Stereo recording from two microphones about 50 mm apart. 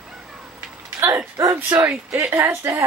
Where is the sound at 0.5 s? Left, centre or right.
Right.